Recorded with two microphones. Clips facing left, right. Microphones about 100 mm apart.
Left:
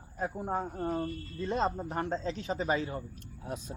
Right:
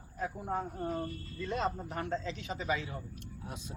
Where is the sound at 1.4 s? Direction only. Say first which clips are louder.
Left 3 dB; 30° left (ahead or behind).